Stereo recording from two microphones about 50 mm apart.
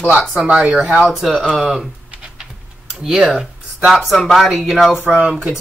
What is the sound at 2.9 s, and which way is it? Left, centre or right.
Speech, centre.